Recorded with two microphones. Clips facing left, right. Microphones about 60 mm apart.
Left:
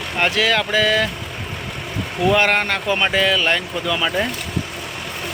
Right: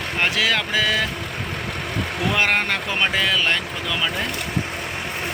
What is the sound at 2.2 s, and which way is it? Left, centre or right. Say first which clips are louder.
Speech: left 4 dB; centre.